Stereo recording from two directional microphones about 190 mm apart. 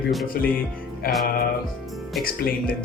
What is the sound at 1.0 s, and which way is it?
Speech, 50° left (ahead or behind).